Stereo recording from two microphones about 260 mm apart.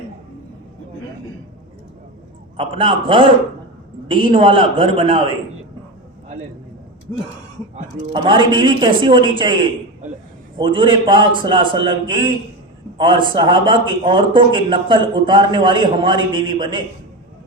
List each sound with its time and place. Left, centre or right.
2.6 s a man's voice: centre
8.1 s a man's voice: centre